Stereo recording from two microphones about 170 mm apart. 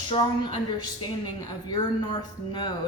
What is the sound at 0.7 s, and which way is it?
A woman's voice, 25° left (ahead or behind).